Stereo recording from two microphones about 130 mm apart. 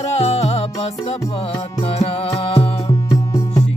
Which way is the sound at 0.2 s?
55° left (ahead or behind).